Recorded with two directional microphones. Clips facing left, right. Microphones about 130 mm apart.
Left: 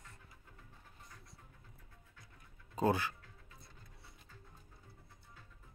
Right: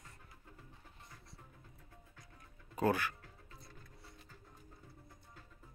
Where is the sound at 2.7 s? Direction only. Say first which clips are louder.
Even; 20° left (ahead or behind).